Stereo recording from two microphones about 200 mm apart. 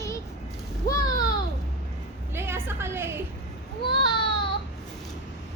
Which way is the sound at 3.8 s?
25° left (ahead or behind).